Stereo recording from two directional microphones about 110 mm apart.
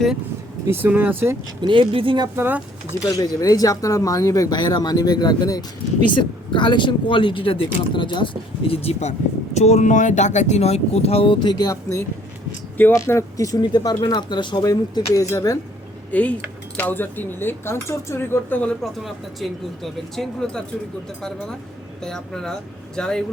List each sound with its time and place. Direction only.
0.7 s speech: 20° right (ahead or behind)
1.6 s speech: 50° right (ahead or behind)
2.3 s speech: 20° right (ahead or behind)
3.1 s speech: 35° left (ahead or behind)
6.5 s speech: 50° left (ahead or behind)
14.6 s speech: 30° left (ahead or behind)
16.1 s speech: 15° left (ahead or behind)
18.8 s speech: centre (ahead or behind)